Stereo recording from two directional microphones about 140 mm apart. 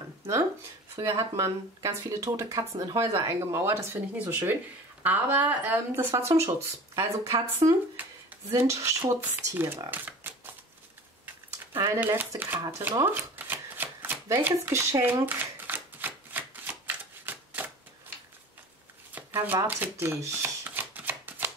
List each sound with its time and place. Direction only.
0.9 s speech: 25° right (ahead or behind)
9.8 s a sound: 15° right (ahead or behind)
12.0 s speech: 15° right (ahead or behind)
13.0 s shuffling cards: 15° right (ahead or behind)
19.1 s shuffling cards: 15° right (ahead or behind)